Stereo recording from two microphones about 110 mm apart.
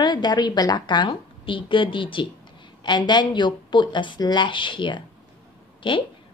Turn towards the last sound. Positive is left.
turn(degrees=50)  # may be behind; listen again after turning